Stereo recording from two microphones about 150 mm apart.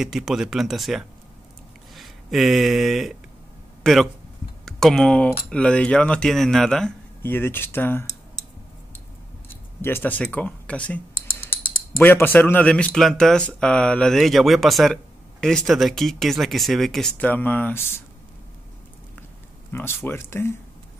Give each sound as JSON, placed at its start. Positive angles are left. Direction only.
{"t": 0.0, "sound": "speech", "side_deg": 0}
{"t": 7.2, "sound": "speech", "side_deg": 15}
{"t": 9.5, "sound": "speech", "side_deg": 15}
{"t": 12.0, "sound": "speech", "side_deg": 15}
{"t": 19.7, "sound": "speech", "side_deg": 15}